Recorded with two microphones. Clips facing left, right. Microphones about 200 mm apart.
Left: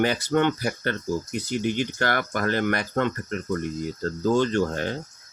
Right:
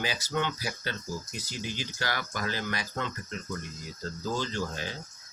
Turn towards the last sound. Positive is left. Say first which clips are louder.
# left 10 dB
turn(degrees=55)  # may be behind; listen again after turning